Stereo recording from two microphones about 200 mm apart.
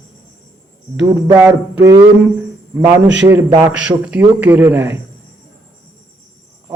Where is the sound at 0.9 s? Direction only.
15° right (ahead or behind).